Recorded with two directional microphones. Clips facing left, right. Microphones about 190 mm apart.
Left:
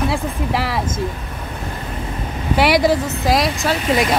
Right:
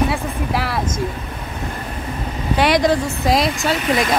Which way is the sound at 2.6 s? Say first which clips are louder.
Left 1 dB; 5° left (ahead or behind).